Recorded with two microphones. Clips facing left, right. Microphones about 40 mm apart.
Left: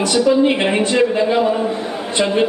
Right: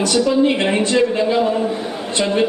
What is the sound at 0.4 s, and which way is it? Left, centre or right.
Speech, centre.